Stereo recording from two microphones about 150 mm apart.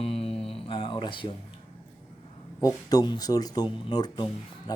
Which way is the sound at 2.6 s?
25° left (ahead or behind).